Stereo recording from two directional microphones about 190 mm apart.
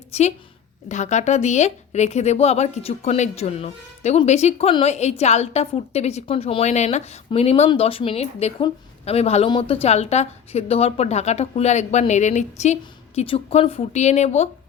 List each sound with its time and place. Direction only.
0.1 s a woman's voice: 35° left (ahead or behind)